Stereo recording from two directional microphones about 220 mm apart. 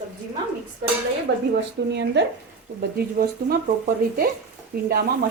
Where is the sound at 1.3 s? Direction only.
55° right (ahead or behind).